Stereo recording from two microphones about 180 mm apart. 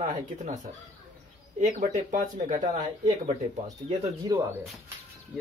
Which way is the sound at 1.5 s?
45° right (ahead or behind).